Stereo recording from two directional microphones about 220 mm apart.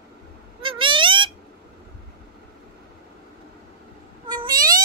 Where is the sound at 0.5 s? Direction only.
25° right (ahead or behind).